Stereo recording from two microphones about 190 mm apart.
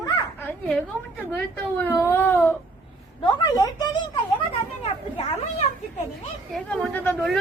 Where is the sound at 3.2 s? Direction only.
25° left (ahead or behind).